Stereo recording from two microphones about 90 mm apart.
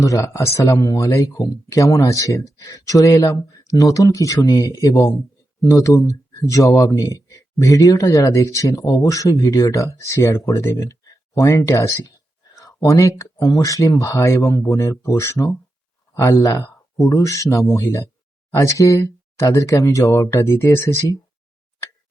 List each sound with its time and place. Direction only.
0.0 s speech: 35° left (ahead or behind)
6.0 s speech: 35° left (ahead or behind)
12.5 s a sound: 40° left (ahead or behind)
13.4 s speech: 40° left (ahead or behind)